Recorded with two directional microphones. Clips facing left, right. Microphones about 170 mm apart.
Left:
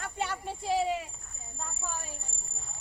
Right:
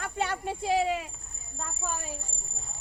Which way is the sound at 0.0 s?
65° right (ahead or behind).